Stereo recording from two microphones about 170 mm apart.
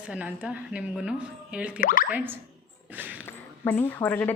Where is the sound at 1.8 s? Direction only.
55° left (ahead or behind).